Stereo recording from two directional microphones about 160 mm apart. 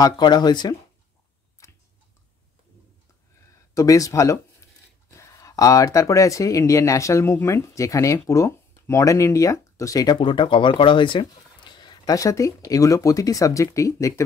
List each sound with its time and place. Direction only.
0.0 s speech: 25° left (ahead or behind)
3.7 s speech: 20° left (ahead or behind)
10.1 s speech: 30° left (ahead or behind)